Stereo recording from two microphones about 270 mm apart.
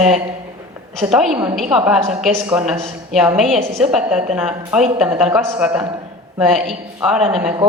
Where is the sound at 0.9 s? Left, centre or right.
Centre.